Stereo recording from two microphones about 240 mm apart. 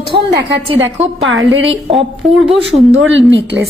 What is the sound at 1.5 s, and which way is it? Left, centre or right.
Speech, right.